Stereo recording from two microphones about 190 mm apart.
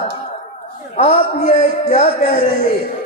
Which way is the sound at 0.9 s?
35° left (ahead or behind).